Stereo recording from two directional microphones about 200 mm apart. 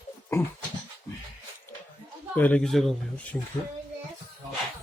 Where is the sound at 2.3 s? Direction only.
10° left (ahead or behind).